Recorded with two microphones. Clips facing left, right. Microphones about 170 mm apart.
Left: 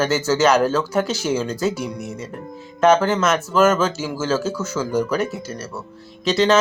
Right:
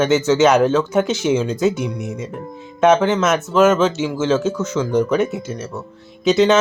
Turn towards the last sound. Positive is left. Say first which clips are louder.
# right 3 dB
turn(degrees=-5)  # may be behind; listen again after turning